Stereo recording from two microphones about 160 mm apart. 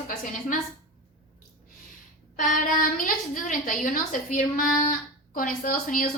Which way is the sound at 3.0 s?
55° left (ahead or behind).